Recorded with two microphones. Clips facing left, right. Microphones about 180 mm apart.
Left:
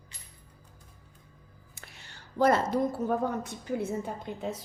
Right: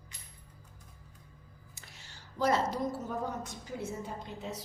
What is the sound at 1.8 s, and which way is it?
A woman's voice, 60° left (ahead or behind).